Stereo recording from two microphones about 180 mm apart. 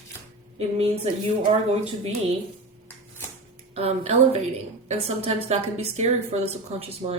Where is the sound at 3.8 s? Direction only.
35° right (ahead or behind).